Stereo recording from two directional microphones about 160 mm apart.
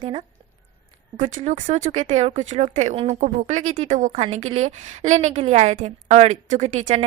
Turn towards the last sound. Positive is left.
turn(degrees=-45)  # may be behind; listen again after turning